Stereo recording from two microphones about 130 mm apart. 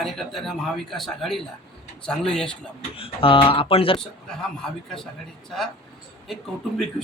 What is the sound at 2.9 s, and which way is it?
Speech, 45° left (ahead or behind).